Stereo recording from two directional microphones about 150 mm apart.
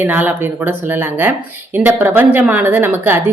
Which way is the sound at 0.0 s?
10° right (ahead or behind).